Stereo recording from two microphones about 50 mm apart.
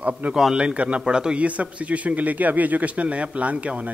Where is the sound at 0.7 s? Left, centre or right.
Right.